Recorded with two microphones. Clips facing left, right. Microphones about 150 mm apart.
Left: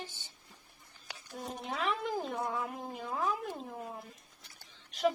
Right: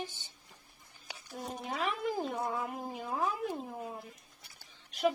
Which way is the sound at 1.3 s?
Centre (ahead or behind).